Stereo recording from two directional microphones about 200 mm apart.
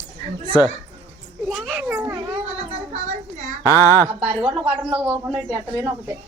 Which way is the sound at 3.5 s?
15° left (ahead or behind).